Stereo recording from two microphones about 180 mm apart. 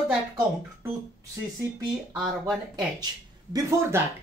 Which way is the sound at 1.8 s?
20° right (ahead or behind).